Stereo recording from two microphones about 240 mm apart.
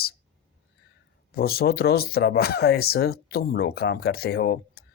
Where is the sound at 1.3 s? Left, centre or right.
Left.